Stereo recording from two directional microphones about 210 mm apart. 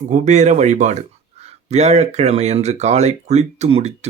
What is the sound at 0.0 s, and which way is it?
Speech, 35° right (ahead or behind).